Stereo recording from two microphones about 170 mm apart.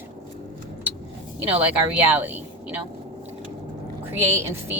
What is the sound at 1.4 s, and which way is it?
A woman's voice, 10° right (ahead or behind).